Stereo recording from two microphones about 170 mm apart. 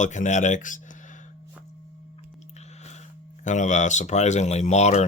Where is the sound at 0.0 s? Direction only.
45° left (ahead or behind).